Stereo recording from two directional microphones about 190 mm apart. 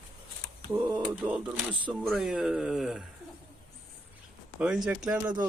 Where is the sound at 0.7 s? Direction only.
10° right (ahead or behind).